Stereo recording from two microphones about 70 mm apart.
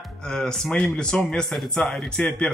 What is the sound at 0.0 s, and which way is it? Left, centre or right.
Speech, centre.